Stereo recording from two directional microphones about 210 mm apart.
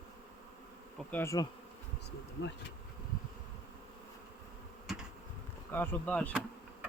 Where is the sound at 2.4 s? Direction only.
60° left (ahead or behind).